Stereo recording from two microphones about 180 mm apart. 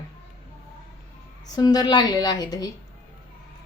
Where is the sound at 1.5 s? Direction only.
20° left (ahead or behind).